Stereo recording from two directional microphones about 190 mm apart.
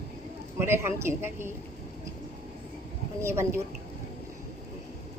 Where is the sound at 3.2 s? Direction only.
15° right (ahead or behind).